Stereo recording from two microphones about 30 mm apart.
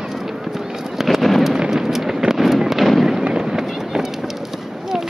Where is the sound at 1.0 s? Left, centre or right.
Centre.